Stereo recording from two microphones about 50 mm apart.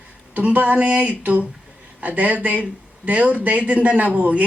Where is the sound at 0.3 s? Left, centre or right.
Right.